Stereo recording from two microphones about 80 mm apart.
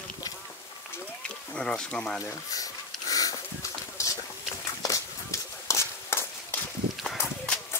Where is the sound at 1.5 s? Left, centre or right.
Centre.